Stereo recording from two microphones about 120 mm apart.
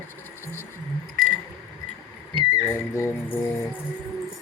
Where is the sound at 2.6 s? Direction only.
20° left (ahead or behind).